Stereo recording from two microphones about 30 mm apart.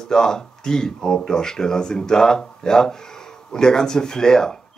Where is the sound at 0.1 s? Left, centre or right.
Centre.